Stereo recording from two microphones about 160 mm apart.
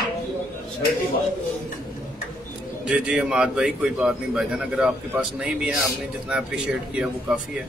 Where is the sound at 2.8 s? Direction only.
5° right (ahead or behind).